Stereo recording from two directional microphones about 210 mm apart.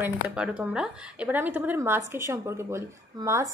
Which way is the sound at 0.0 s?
5° right (ahead or behind).